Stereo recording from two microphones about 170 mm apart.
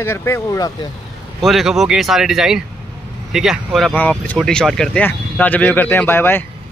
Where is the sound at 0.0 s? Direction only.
15° left (ahead or behind).